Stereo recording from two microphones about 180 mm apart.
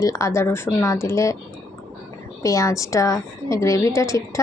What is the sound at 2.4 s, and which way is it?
A woman's voice, 15° left (ahead or behind).